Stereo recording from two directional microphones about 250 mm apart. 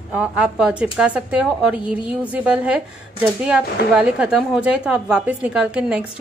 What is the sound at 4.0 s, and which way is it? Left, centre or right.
A woman's voice, centre.